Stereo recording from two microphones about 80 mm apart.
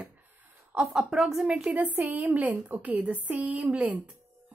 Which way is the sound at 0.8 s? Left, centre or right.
Centre.